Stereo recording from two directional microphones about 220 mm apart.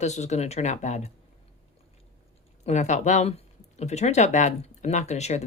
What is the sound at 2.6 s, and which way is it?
Speech, 30° left (ahead or behind).